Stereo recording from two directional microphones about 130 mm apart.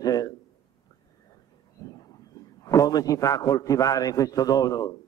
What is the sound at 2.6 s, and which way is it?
A man's voice, 25° left (ahead or behind).